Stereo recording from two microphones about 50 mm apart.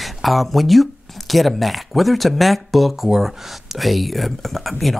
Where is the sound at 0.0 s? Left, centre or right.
Centre.